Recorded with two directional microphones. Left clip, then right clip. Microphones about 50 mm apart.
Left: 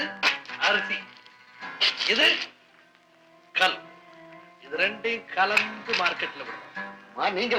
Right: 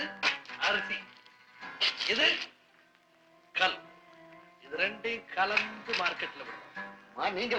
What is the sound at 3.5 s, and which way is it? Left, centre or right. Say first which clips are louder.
Speech: left 6 dB; right.